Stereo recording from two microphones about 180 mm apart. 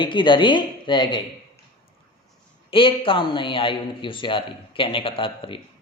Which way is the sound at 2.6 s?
30° left (ahead or behind).